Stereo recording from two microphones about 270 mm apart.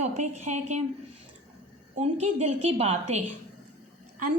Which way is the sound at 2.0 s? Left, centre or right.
Right.